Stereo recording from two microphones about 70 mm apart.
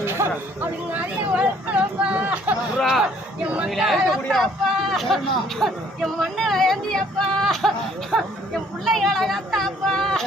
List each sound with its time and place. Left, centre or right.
0.0 s speech: right
2.7 s speech: centre